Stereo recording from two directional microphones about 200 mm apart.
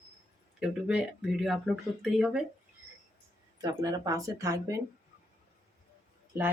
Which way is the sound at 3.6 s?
20° right (ahead or behind).